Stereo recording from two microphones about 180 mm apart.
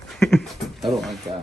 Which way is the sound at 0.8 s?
Centre (ahead or behind).